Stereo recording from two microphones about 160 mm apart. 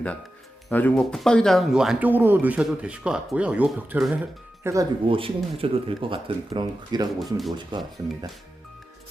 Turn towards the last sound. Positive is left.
turn(degrees=-30)  # may be behind; listen again after turning